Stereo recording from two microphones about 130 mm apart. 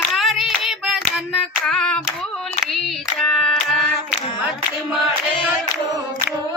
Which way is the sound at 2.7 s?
5° left (ahead or behind).